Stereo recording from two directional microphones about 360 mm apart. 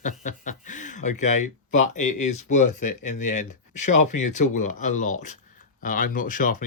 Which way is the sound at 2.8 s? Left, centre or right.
Left.